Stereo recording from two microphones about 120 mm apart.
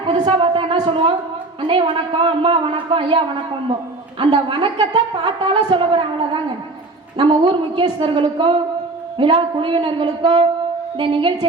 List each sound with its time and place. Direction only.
0.0 s a sound: 45° right (ahead or behind)
1.6 s a man's voice: 45° right (ahead or behind)
7.2 s a man's voice: 45° right (ahead or behind)